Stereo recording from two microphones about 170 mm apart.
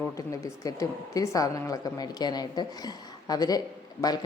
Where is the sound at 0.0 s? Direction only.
20° left (ahead or behind).